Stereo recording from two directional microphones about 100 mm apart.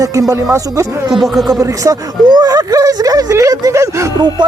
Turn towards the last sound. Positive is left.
turn(degrees=-45)  # may be behind; listen again after turning